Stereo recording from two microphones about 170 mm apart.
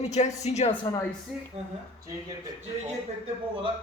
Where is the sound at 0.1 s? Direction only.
40° left (ahead or behind).